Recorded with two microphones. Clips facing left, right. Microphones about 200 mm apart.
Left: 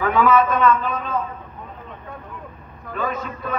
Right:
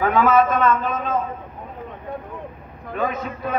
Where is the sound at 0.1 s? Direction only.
45° right (ahead or behind).